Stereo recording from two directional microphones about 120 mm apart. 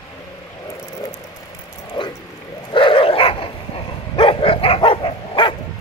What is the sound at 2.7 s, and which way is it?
Dog, 45° left (ahead or behind).